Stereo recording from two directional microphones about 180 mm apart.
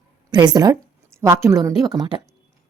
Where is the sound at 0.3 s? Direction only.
25° right (ahead or behind).